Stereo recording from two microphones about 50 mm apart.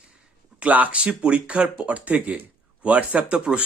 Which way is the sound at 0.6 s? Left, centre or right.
Right.